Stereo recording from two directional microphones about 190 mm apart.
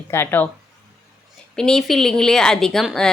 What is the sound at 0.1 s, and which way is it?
Speech, 10° left (ahead or behind).